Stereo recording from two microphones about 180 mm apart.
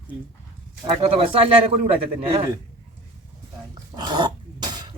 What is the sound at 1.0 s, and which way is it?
Speech, 30° right (ahead or behind).